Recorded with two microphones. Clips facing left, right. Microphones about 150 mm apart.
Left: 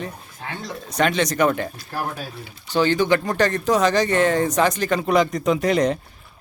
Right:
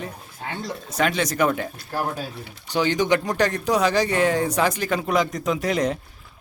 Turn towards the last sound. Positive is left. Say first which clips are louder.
# left 4 dB
turn(degrees=-5)  # may be behind; listen again after turning